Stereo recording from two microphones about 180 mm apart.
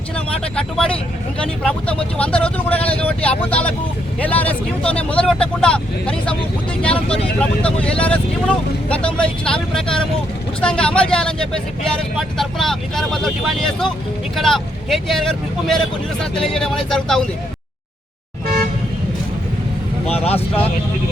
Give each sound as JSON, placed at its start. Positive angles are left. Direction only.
{"t": 0.5, "sound": "speech", "side_deg": 5}
{"t": 20.1, "sound": "vehicle", "side_deg": 35}